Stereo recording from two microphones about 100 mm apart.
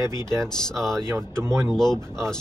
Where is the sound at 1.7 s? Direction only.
5° left (ahead or behind).